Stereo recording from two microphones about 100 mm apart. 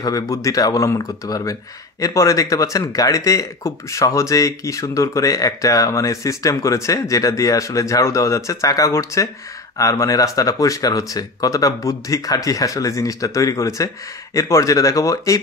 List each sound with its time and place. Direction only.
0.0 s speech: 35° left (ahead or behind)